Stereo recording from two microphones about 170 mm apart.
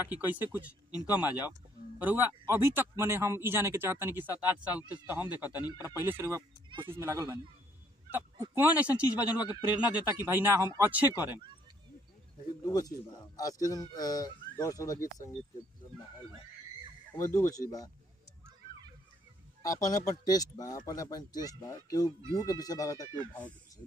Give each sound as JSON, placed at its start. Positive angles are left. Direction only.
{"t": 0.0, "sound": "speech", "side_deg": -10}
{"t": 12.6, "sound": "speech", "side_deg": 20}
{"t": 17.1, "sound": "speech", "side_deg": 15}
{"t": 19.6, "sound": "speech", "side_deg": 20}